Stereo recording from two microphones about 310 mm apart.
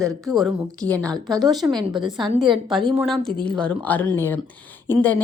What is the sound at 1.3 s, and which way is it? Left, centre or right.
A woman's voice, centre.